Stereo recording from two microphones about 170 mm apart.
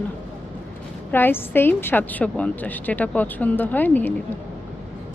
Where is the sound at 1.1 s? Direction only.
10° left (ahead or behind).